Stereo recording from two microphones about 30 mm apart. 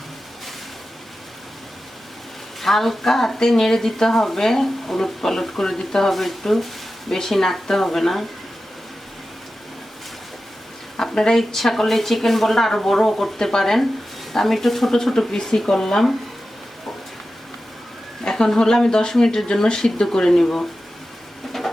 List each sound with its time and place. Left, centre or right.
2.6 s speech: centre
6.1 s speech: centre
10.9 s a sound: left
11.3 s speech: centre
15.3 s speech: left
18.3 s speech: left